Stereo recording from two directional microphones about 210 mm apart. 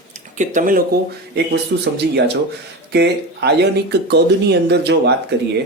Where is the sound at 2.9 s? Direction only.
55° right (ahead or behind).